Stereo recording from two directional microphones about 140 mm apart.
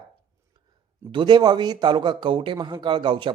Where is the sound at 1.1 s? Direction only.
35° right (ahead or behind).